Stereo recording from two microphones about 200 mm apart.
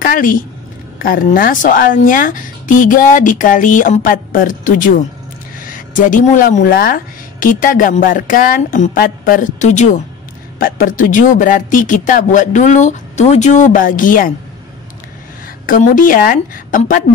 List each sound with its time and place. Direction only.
0.0 s a woman's voice: 45° left (ahead or behind)
15.6 s a woman's voice: 40° left (ahead or behind)